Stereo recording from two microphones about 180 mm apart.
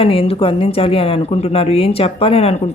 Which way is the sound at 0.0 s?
30° left (ahead or behind).